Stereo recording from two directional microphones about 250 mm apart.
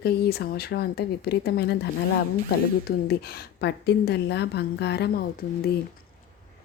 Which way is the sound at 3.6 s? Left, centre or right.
Left.